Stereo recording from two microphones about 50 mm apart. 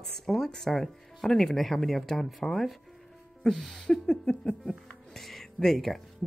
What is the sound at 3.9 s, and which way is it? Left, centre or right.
Speech, centre.